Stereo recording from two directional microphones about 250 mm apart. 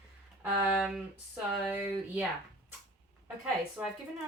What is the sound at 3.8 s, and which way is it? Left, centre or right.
Speech, centre.